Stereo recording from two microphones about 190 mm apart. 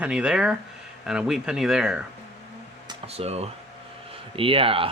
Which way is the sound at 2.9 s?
30° right (ahead or behind).